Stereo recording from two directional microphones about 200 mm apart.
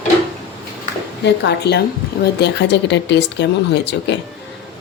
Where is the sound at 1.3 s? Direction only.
55° left (ahead or behind).